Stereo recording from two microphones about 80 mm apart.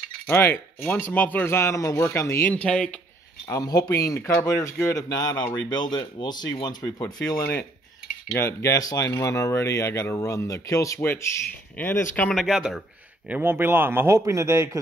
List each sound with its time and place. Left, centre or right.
0.3 s speech: left
2.5 s speech: centre
3.6 s speech: left
4.9 s speech: left
5.7 s speech: left
8.3 s speech: left
11.0 s speech: left
12.3 s speech: centre
13.3 s a man's voice: right